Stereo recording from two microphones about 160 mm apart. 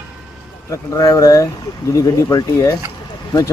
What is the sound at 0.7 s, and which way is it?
Speech, 20° left (ahead or behind).